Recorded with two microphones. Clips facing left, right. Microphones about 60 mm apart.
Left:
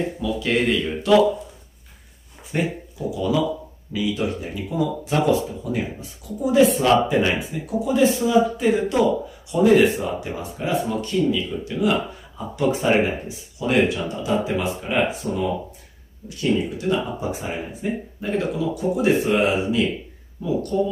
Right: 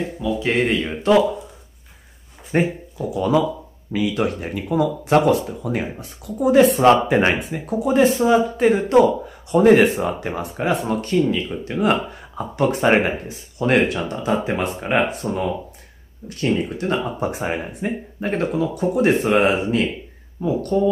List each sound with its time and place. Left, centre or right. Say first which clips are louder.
0.4 s speech: right 1 dB; right
2.5 s speech: right 4 dB; right